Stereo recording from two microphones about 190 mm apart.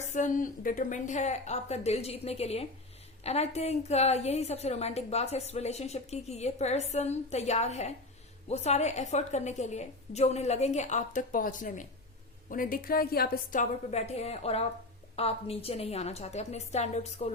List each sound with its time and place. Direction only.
0.0 s a woman's voice: 40° left (ahead or behind)